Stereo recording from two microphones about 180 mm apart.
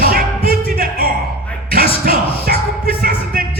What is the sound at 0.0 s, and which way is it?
Music, 55° right (ahead or behind).